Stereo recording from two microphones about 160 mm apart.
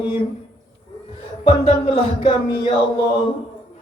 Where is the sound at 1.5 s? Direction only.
35° left (ahead or behind).